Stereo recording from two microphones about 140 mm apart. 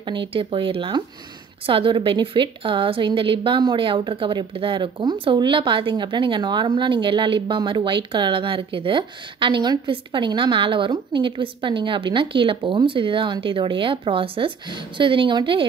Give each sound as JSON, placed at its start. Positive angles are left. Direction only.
{"t": 0.0, "sound": "a woman's voice", "side_deg": -35}